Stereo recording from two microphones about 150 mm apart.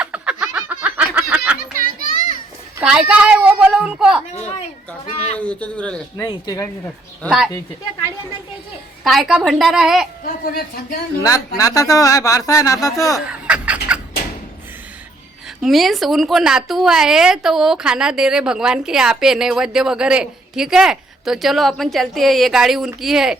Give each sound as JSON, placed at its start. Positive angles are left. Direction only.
{"t": 0.0, "sound": "a sound", "side_deg": -5}
{"t": 2.8, "sound": "a woman's voice", "side_deg": -5}
{"t": 5.4, "sound": "speech", "side_deg": 10}
{"t": 6.1, "sound": "speech", "side_deg": 25}
{"t": 7.2, "sound": "a woman's voice", "side_deg": 0}
{"t": 9.0, "sound": "a woman's voice", "side_deg": 0}
{"t": 10.2, "sound": "speech", "side_deg": 80}
{"t": 11.2, "sound": "speech", "side_deg": 20}
{"t": 13.2, "sound": "a sound", "side_deg": -10}
{"t": 15.6, "sound": "a woman's voice", "side_deg": 0}